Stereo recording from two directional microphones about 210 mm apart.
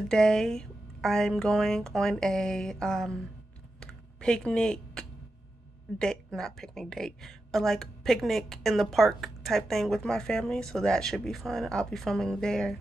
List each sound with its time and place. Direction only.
0.1 s a woman's voice: centre (ahead or behind)
3.8 s computer keyboard: 5° left (ahead or behind)
5.9 s a woman's voice: 5° left (ahead or behind)